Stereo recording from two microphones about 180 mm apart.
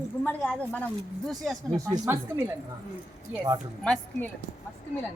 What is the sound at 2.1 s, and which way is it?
Speech, 15° right (ahead or behind).